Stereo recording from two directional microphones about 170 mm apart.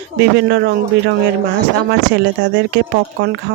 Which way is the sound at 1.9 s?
90° right.